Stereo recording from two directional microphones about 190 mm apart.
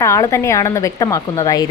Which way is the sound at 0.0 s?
15° left (ahead or behind).